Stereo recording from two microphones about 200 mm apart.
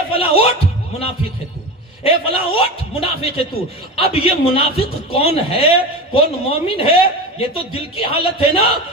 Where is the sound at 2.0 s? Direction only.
25° left (ahead or behind).